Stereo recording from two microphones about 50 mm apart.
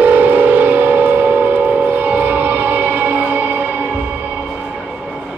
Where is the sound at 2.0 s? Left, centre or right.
Right.